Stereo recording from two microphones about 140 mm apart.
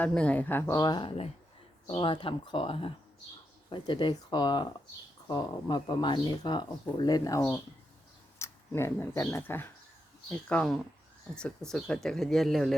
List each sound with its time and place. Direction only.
0.0 s speech: 10° left (ahead or behind)
0.7 s speech: 30° left (ahead or behind)
10.2 s speech: 5° left (ahead or behind)